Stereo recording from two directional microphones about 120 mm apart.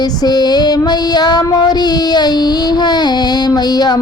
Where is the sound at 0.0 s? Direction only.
35° left (ahead or behind).